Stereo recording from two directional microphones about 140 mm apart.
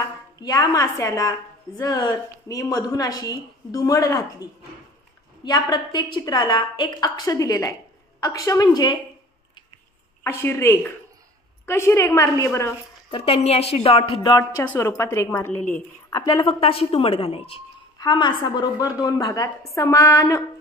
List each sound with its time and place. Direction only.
0.4 s a woman's voice: 25° left (ahead or behind)
10.2 s a woman's voice: 20° left (ahead or behind)
13.1 s a woman's voice: 45° left (ahead or behind)
14.7 s a woman's voice: 20° left (ahead or behind)
16.1 s a woman's voice: 30° left (ahead or behind)
17.9 s a woman's voice: 30° left (ahead or behind)